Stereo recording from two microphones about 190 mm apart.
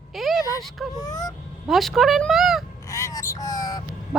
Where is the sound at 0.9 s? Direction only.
20° left (ahead or behind).